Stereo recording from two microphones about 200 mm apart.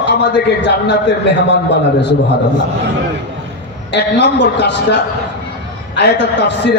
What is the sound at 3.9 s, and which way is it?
A man's voice, 60° left (ahead or behind).